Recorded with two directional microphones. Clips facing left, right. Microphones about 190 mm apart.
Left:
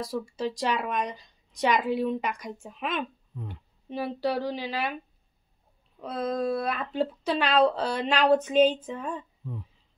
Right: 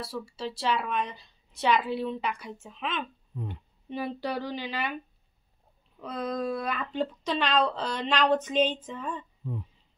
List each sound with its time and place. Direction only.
0.5 s speech: 15° left (ahead or behind)
1.9 s a woman's voice: 45° left (ahead or behind)
2.6 s speech: 10° left (ahead or behind)
3.9 s a sound: centre (ahead or behind)
6.0 s a sound: 5° left (ahead or behind)
6.3 s speech: 35° left (ahead or behind)
6.7 s speech: 5° left (ahead or behind)